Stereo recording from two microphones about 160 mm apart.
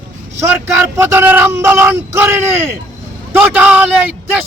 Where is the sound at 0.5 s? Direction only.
10° right (ahead or behind).